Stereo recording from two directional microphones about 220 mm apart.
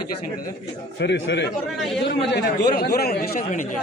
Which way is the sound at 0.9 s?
55° left (ahead or behind).